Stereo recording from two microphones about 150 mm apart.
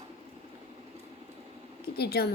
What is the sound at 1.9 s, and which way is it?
Speech, 90° left.